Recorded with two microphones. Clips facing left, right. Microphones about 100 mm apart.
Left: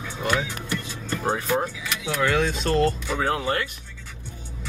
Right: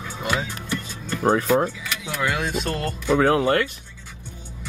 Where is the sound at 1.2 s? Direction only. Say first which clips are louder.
Right 6 dB; 55° right (ahead or behind).